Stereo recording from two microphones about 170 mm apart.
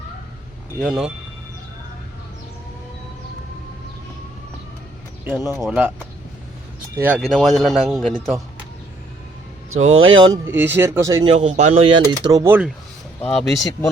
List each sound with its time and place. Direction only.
0.8 s a man's voice: 5° right (ahead or behind)
5.2 s speech: 15° right (ahead or behind)
5.6 s a man's voice: 5° right (ahead or behind)
6.9 s speech: 10° right (ahead or behind)
7.2 s a man's voice: centre (ahead or behind)
9.8 s speech: 35° right (ahead or behind)
10.4 s speech: 15° right (ahead or behind)
11.3 s a man's voice: 35° right (ahead or behind)
12.3 s speech: 15° right (ahead or behind)
13.2 s a man's voice: 5° left (ahead or behind)